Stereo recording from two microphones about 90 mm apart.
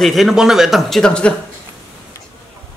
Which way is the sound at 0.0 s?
Centre (ahead or behind).